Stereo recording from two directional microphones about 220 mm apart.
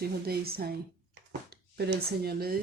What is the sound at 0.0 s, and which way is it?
Speech, 45° right (ahead or behind).